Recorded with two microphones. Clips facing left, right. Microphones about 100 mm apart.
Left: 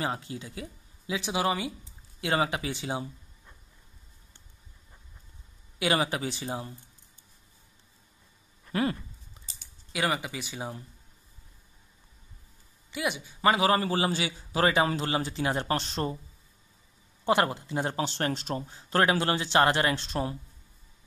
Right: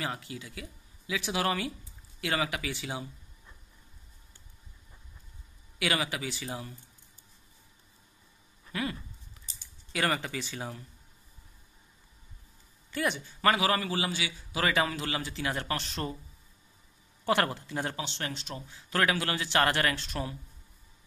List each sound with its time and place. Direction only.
0.0 s speech: 30° left (ahead or behind)
5.8 s a man's voice: 30° left (ahead or behind)
9.9 s speech: 10° left (ahead or behind)
12.9 s speech: 10° left (ahead or behind)
13.4 s a man's voice: 25° left (ahead or behind)
17.2 s speech: 20° left (ahead or behind)
17.9 s a man's voice: 40° left (ahead or behind)